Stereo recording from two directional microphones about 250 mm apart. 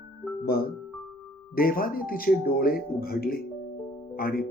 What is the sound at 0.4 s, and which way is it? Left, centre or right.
Speech, left.